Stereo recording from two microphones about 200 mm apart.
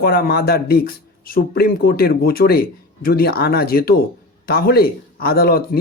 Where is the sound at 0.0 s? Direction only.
50° left (ahead or behind).